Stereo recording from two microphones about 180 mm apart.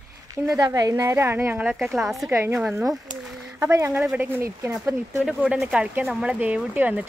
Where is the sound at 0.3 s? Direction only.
20° right (ahead or behind).